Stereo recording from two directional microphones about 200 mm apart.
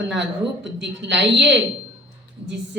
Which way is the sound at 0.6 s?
60° right (ahead or behind).